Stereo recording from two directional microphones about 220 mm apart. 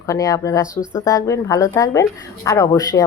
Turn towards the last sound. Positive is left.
turn(degrees=15)  # may be behind; listen again after turning